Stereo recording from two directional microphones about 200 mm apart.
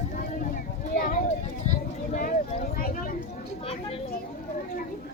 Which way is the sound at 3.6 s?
30° left (ahead or behind).